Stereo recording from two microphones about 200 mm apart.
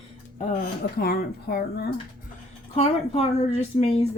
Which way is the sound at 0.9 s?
50° left (ahead or behind).